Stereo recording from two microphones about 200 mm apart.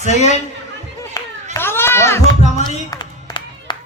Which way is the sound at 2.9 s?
20° left (ahead or behind).